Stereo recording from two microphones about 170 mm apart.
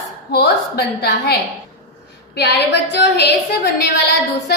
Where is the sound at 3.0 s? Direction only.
75° left (ahead or behind).